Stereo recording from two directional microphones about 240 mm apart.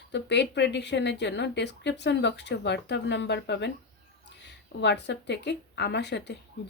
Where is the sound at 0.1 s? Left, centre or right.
Left.